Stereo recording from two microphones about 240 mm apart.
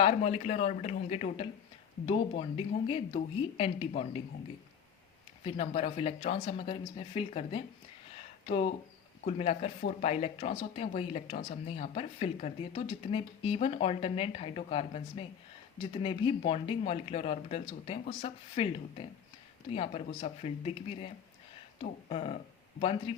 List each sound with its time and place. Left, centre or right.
0.0 s speech: left
5.4 s speech: left
22.1 s speech: left